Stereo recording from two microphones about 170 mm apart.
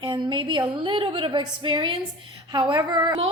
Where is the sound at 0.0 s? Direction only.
30° right (ahead or behind).